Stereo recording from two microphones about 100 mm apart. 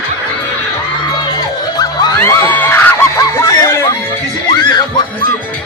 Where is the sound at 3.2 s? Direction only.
35° left (ahead or behind).